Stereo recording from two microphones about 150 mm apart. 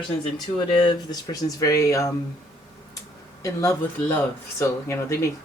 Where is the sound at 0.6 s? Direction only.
30° left (ahead or behind).